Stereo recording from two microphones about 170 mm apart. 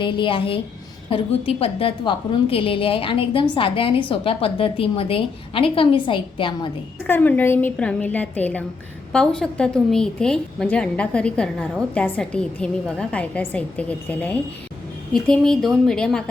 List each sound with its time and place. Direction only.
0.0 s a woman's voice: 30° left (ahead or behind)
7.1 s a woman's voice: 10° left (ahead or behind)